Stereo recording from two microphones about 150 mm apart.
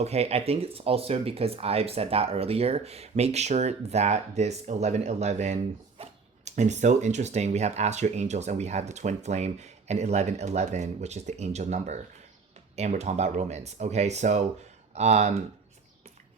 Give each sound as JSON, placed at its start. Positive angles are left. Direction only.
{"t": 0.0, "sound": "speech", "side_deg": -45}